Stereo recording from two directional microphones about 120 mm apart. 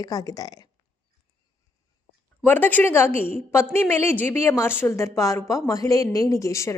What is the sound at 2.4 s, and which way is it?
A woman's voice, 15° left (ahead or behind).